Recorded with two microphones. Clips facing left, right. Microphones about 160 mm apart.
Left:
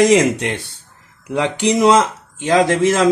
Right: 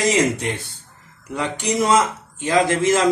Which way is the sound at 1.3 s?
85° left.